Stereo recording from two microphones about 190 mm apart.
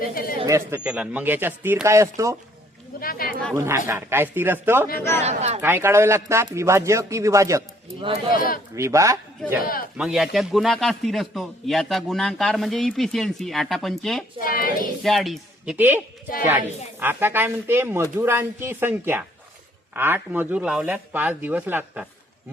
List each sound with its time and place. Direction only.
0.1 s speech: 50° left (ahead or behind)
0.4 s speech: 15° right (ahead or behind)
3.0 s speech: 50° left (ahead or behind)
3.5 s speech: 15° right (ahead or behind)
5.2 s speech: 35° right (ahead or behind)
5.6 s speech: 10° right (ahead or behind)
8.0 s speech: 30° right (ahead or behind)
8.4 s speech: 45° left (ahead or behind)
8.7 s speech: 15° right (ahead or behind)
10.0 s a man's voice: centre (ahead or behind)
14.4 s speech: 50° left (ahead or behind)
15.0 s a man's voice: centre (ahead or behind)